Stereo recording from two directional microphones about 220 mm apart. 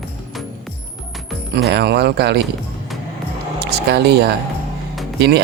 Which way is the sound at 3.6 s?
50° right (ahead or behind).